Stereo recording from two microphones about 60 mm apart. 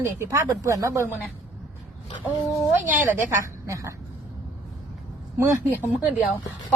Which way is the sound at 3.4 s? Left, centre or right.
Right.